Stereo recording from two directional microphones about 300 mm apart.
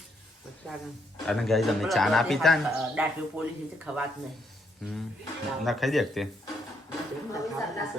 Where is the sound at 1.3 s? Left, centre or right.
Centre.